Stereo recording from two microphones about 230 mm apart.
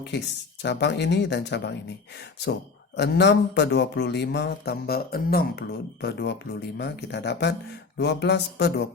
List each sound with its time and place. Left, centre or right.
0.6 s speech: left
2.9 s speech: left